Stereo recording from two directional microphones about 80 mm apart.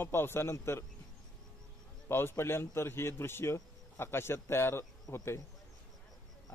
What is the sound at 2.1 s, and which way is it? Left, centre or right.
A man's voice, left.